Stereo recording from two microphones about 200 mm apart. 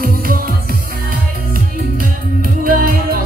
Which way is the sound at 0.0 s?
45° right (ahead or behind).